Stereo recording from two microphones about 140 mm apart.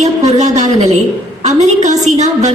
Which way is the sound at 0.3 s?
55° right (ahead or behind).